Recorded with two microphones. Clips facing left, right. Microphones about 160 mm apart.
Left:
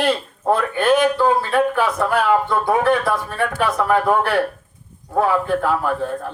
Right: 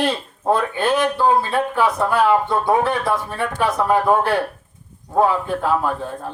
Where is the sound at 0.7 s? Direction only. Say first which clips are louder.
Left 3 dB; 20° right (ahead or behind).